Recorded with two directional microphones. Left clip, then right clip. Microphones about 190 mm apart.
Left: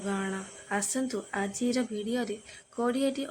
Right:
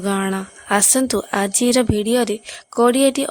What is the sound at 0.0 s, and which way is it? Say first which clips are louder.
Speech: right 12 dB; 60° right (ahead or behind).